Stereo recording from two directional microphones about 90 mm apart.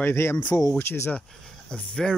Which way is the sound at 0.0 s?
30° left (ahead or behind).